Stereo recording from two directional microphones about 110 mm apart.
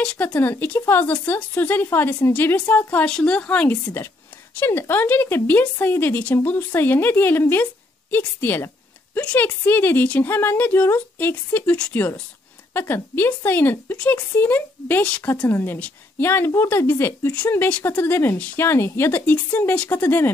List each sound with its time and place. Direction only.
0.0 s a woman's voice: 10° left (ahead or behind)